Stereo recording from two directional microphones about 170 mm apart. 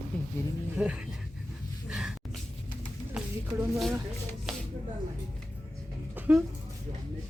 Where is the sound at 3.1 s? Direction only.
10° right (ahead or behind).